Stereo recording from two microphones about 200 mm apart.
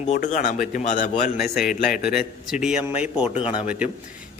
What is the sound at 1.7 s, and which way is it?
Speech, 45° left (ahead or behind).